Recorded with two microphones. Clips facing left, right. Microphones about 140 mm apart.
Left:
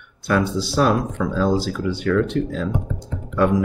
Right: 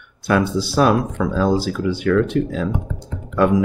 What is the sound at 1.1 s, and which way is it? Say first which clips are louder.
Speech: right 2 dB; 60° right (ahead or behind).